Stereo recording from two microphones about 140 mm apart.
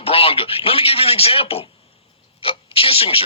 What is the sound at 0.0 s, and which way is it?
A man's voice, 40° left (ahead or behind).